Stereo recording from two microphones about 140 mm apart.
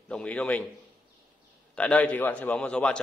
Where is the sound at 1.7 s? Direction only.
10° left (ahead or behind).